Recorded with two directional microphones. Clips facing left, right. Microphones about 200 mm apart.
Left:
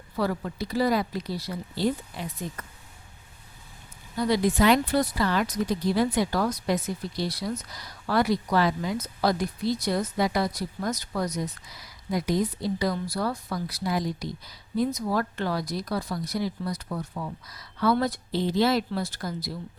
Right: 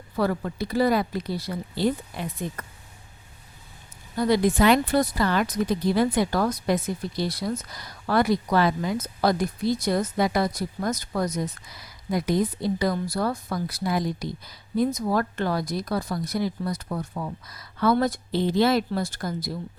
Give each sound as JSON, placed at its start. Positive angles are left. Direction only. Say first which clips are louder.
{"t": 0.2, "sound": "speech", "louder": "right 3 dB", "side_deg": -55}
{"t": 4.2, "sound": "speech", "louder": "right 2 dB", "side_deg": -55}